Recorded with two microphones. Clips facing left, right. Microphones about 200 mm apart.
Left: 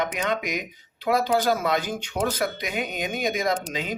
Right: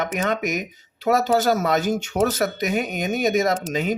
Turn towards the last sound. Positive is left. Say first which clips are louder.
# right 4 dB
turn(degrees=-45)  # may be behind; listen again after turning